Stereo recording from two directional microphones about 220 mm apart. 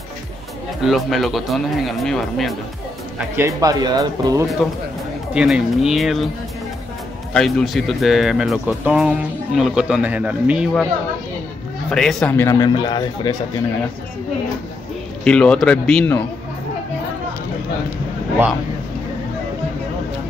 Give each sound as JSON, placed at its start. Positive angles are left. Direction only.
{"t": 0.8, "sound": "speech", "side_deg": 0}
{"t": 3.3, "sound": "speech", "side_deg": -15}
{"t": 5.3, "sound": "speech", "side_deg": -5}
{"t": 7.3, "sound": "speech", "side_deg": 0}
{"t": 11.9, "sound": "speech", "side_deg": 0}
{"t": 15.2, "sound": "speech", "side_deg": 5}